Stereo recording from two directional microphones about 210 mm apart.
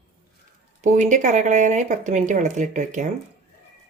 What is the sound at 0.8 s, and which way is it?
Speech, 35° right (ahead or behind).